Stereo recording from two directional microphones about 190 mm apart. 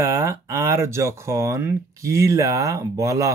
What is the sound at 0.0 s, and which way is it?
Speech, 15° right (ahead or behind).